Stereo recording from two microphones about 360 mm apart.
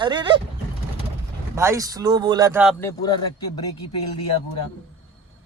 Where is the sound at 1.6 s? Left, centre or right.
Centre.